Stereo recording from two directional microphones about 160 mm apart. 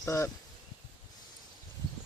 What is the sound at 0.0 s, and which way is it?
Speech, 15° left (ahead or behind).